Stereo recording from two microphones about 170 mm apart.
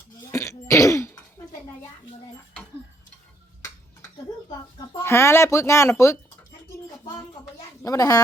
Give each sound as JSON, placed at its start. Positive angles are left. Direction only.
{"t": 0.3, "sound": "throat clearing", "side_deg": 15}
{"t": 5.0, "sound": "speech", "side_deg": 15}
{"t": 7.8, "sound": "a child's voice", "side_deg": 20}